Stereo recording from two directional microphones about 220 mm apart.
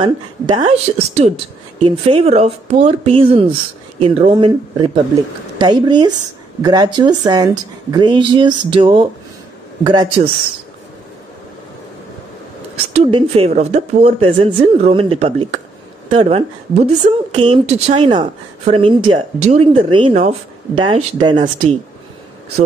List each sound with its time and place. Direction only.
0.0 s speech: 20° right (ahead or behind)
12.7 s speech: 25° right (ahead or behind)